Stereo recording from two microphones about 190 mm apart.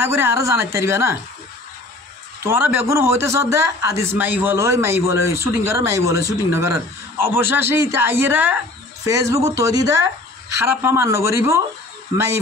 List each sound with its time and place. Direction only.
0.0 s a man's voice: 15° right (ahead or behind)
2.4 s a man's voice: 10° right (ahead or behind)